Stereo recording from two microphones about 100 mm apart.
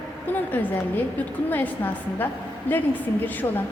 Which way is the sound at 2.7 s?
20° left (ahead or behind).